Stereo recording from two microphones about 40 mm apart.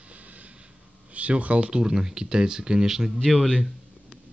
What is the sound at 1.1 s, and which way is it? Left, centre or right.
Speech, right.